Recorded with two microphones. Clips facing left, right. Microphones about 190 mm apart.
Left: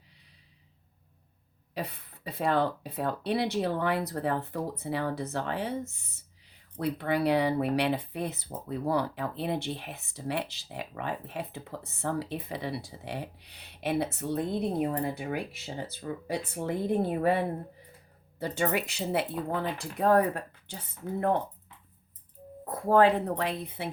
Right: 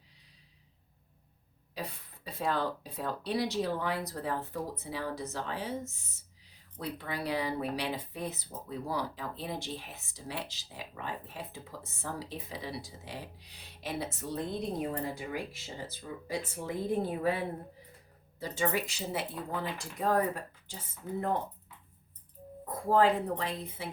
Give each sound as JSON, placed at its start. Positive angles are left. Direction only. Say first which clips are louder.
{"t": 1.7, "sound": "speech", "louder": "left 4 dB", "side_deg": 60}
{"t": 22.7, "sound": "speech", "louder": "left 4 dB", "side_deg": 65}